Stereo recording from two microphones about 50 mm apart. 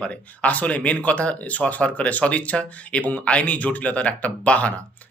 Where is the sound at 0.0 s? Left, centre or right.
Left.